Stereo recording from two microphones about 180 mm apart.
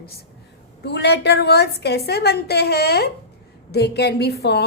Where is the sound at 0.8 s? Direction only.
70° left (ahead or behind).